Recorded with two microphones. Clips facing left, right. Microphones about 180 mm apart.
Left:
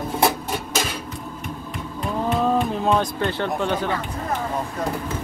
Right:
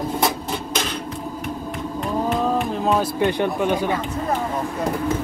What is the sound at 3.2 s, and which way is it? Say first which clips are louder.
Speech: right 4 dB; 15° right (ahead or behind).